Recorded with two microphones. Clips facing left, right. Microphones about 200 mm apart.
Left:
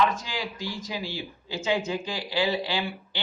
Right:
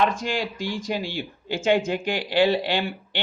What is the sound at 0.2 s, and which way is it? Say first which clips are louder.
Speech: right 8 dB; 75° right (ahead or behind).